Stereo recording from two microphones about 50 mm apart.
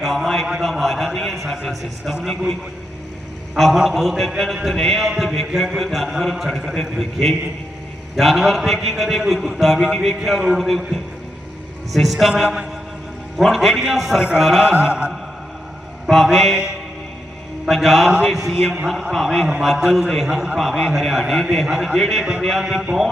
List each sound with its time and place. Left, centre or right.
0.0 s a man's voice: centre
3.5 s a man's voice: centre
11.9 s a man's voice: centre
14.6 s speech: right
16.0 s a man's voice: centre
17.8 s a man's voice: centre
18.1 s mantra: centre
19.1 s a man's voice: centre